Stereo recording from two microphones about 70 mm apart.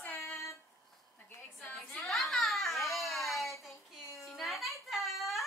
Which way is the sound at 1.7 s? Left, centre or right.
Centre.